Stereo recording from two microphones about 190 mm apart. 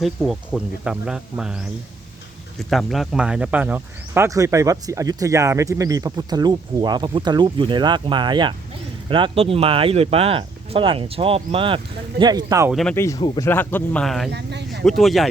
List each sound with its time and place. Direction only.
0.0 s speech: centre (ahead or behind)
2.6 s speech: centre (ahead or behind); by 12.7 s 15° right (ahead or behind)
12.7 s speech: 5° left (ahead or behind)
13.0 s speech: 20° left (ahead or behind)
13.5 s speech: 10° left (ahead or behind)